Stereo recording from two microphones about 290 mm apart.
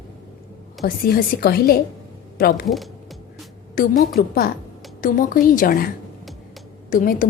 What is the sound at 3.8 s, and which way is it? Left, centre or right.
A woman's voice, left.